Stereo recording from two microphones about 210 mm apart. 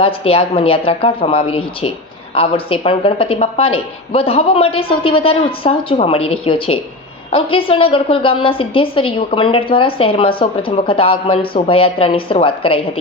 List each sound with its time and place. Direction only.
0.0 s a woman's voice: 25° left (ahead or behind)